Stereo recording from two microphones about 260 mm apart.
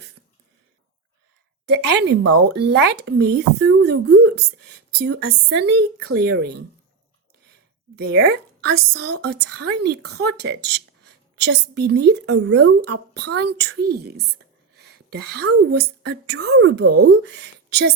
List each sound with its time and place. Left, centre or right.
1.6 s speech: right
7.9 s speech: right
14.3 s whispering: right
15.7 s speech: right